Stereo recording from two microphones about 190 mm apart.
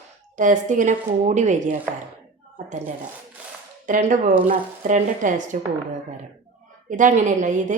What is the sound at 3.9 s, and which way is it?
A woman's voice, 45° right (ahead or behind).